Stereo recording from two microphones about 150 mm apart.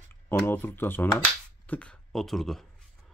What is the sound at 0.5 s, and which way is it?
Speech, 15° left (ahead or behind).